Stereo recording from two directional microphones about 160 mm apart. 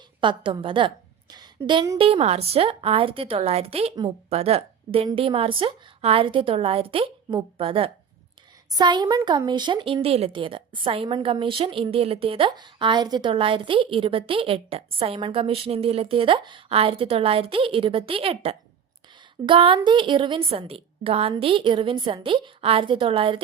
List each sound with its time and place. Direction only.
0.2 s a woman's voice: 30° right (ahead or behind)
2.0 s a woman's voice: 35° right (ahead or behind)